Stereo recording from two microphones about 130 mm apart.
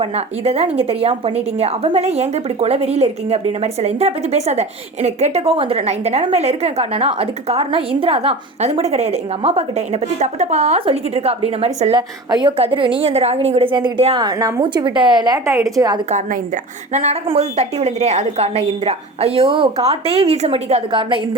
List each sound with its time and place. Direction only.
0.0 s a woman's voice: 50° right (ahead or behind)
11.9 s a woman's voice: 35° right (ahead or behind)
16.0 s a woman's voice: 65° right (ahead or behind)
16.9 s a woman's voice: 55° right (ahead or behind)